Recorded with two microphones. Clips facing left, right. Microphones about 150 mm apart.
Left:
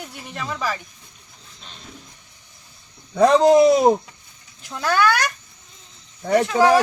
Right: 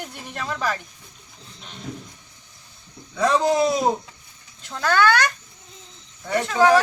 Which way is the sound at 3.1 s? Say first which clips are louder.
Left 6 dB; 60° left (ahead or behind).